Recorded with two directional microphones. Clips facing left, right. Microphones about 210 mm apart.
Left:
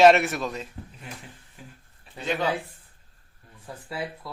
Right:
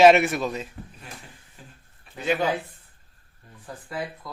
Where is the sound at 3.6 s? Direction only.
5° left (ahead or behind).